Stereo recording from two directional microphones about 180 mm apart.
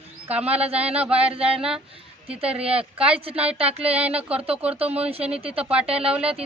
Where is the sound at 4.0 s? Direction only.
5° right (ahead or behind).